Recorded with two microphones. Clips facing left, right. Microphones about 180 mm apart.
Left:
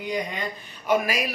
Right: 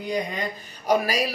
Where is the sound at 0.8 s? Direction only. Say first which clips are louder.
Right 1 dB; 35° right (ahead or behind).